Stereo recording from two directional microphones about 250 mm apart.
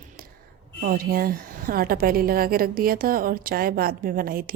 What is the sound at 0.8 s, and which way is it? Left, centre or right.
Speech, right.